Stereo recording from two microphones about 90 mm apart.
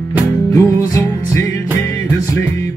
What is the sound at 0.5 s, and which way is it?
Music, 35° left (ahead or behind).